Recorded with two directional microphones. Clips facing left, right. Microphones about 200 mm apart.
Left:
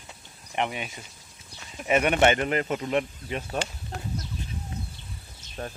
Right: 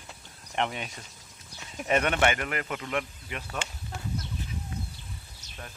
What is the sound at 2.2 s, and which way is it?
Speech, 25° left (ahead or behind).